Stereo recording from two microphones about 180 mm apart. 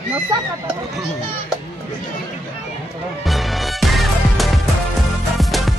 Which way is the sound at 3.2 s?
Centre (ahead or behind).